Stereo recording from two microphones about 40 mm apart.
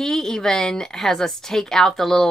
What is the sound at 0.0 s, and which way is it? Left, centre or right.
Speech, centre.